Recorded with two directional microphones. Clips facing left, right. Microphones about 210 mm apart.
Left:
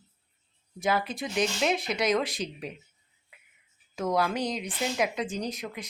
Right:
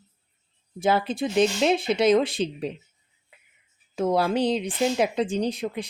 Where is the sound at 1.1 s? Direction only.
30° right (ahead or behind).